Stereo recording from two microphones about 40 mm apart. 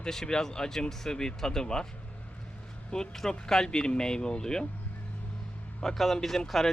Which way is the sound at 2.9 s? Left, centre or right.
Centre.